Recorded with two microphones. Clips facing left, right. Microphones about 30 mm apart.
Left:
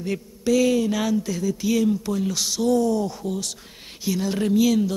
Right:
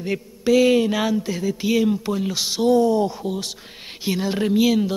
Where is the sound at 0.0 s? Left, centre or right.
Right.